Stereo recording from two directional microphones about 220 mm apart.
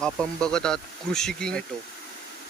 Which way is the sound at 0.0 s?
5° left (ahead or behind).